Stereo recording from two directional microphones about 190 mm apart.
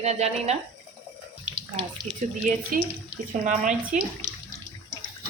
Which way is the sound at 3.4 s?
40° right (ahead or behind).